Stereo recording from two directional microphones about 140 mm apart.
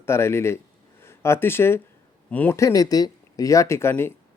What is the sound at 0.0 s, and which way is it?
Speech, 20° left (ahead or behind).